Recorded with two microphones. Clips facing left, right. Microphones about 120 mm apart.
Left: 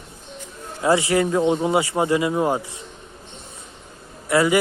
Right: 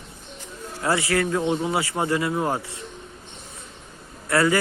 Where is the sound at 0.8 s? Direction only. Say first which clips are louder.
Left 4 dB; 20° left (ahead or behind).